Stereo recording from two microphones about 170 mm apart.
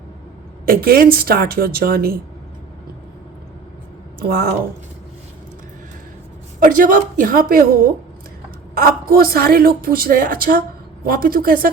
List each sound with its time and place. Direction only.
0.6 s a woman's voice: 60° right (ahead or behind)
4.3 s a woman's voice: 60° right (ahead or behind)
6.6 s a woman's voice: 55° right (ahead or behind)